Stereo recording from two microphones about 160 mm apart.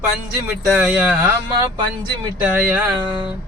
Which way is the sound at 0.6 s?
5° right (ahead or behind).